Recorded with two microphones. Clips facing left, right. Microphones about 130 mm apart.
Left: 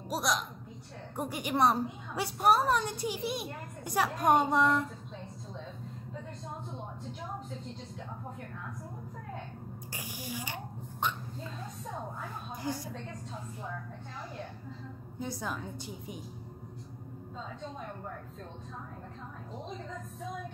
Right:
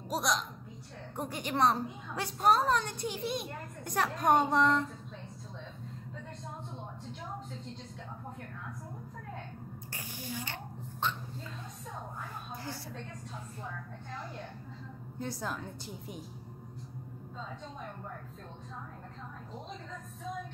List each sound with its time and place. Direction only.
0.1 s a woman's voice: 5° left (ahead or behind)
9.9 s a sound: 10° left (ahead or behind)
12.7 s a woman's voice: 15° left (ahead or behind)
15.1 s a woman's voice: centre (ahead or behind)